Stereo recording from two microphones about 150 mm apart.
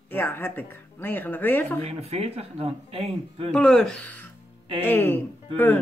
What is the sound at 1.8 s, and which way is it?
Speech, 45° right (ahead or behind).